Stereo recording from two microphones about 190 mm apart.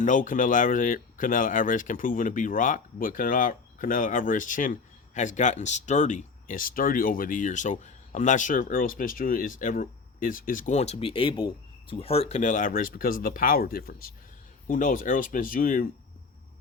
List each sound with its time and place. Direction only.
0.0 s speech: 45° left (ahead or behind)